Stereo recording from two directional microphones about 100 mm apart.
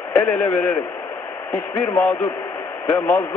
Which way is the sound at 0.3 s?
10° left (ahead or behind).